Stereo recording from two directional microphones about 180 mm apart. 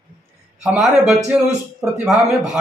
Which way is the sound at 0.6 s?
Centre (ahead or behind).